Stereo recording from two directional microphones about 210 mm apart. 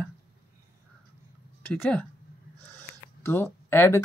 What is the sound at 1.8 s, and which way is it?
Speech, 5° left (ahead or behind).